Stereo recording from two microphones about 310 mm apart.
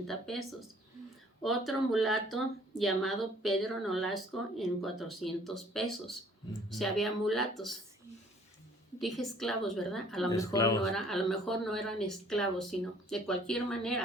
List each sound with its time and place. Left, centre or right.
0.1 s speech: centre
9.0 s speech: centre
10.8 s speech: centre